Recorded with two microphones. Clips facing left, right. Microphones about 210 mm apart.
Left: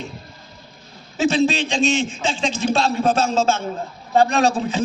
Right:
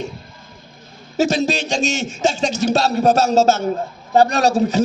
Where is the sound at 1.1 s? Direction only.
40° right (ahead or behind).